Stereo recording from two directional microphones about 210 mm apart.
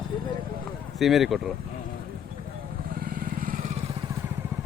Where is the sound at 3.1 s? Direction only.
40° right (ahead or behind).